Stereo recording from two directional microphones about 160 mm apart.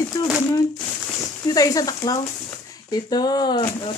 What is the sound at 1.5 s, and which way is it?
Speech, 20° left (ahead or behind).